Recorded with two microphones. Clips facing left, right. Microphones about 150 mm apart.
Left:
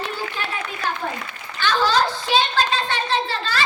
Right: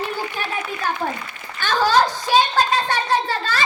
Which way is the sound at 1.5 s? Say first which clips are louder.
Right 2 dB; 45° right (ahead or behind).